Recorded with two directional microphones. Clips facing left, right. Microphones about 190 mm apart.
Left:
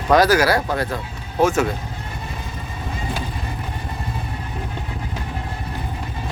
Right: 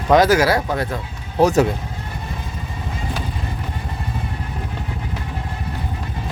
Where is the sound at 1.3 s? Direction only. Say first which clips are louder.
Right 3 dB; 35° right (ahead or behind).